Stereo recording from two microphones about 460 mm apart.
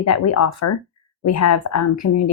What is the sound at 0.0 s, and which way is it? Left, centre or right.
Speech, left.